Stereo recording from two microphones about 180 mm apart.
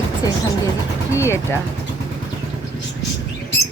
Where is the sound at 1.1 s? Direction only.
15° left (ahead or behind).